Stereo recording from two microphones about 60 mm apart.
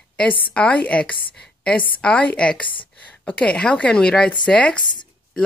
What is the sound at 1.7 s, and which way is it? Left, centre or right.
A woman's voice, centre.